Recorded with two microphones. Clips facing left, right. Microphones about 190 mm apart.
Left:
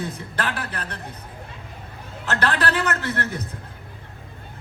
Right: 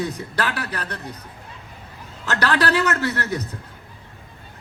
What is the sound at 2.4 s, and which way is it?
Speech, 40° right (ahead or behind).